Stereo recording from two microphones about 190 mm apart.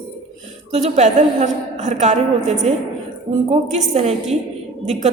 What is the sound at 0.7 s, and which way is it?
A man's voice, 35° right (ahead or behind).